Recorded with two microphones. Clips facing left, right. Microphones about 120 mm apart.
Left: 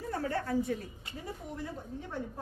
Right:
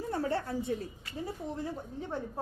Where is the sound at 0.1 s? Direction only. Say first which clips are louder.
Left 1 dB; 30° right (ahead or behind).